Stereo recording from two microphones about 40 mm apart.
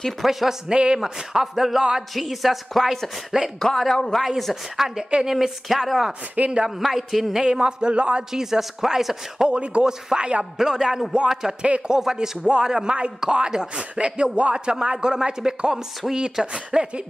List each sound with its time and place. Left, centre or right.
0.2 s speech: centre
0.7 s speech: right
0.9 s speech: centre
3.5 s speech: centre
4.7 s speech: centre
6.4 s speech: right
6.8 s speech: centre
7.4 s speech: right
8.3 s speech: centre
9.5 s speech: right
10.6 s speech: centre
16.5 s speech: right